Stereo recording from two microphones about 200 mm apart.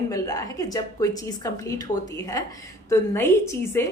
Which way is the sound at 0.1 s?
15° left (ahead or behind).